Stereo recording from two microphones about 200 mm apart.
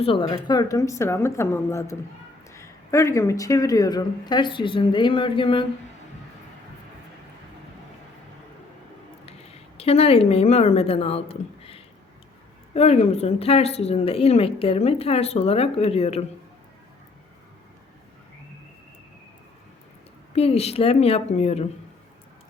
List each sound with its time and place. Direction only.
0.0 s speech: 25° left (ahead or behind)
9.7 s a woman's voice: 30° left (ahead or behind)
20.3 s a woman's voice: 30° left (ahead or behind)